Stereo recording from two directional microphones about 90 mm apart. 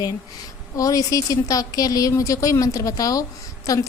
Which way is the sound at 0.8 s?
40° left (ahead or behind).